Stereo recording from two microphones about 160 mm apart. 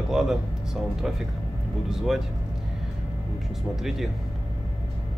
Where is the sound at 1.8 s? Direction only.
Centre (ahead or behind).